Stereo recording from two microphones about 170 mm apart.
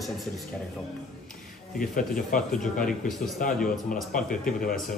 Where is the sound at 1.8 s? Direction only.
55° left (ahead or behind).